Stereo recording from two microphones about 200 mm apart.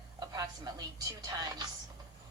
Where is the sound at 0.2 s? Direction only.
20° right (ahead or behind).